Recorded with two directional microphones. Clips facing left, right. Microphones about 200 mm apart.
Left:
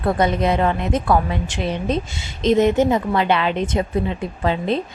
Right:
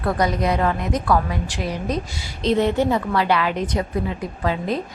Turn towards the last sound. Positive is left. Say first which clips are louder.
# left 3 dB
turn(degrees=25)  # may be behind; listen again after turning